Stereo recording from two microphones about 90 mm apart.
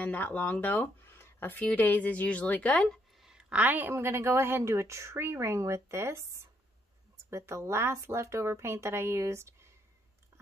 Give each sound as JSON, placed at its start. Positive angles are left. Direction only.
{"t": 0.0, "sound": "speech", "side_deg": 20}
{"t": 3.2, "sound": "a sound", "side_deg": -10}
{"t": 3.9, "sound": "speech", "side_deg": -30}